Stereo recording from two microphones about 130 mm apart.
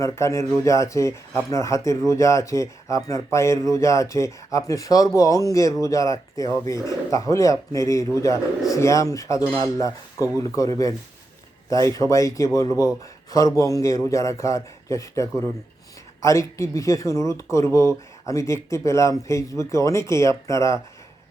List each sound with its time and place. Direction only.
0.0 s speech: 25° left (ahead or behind)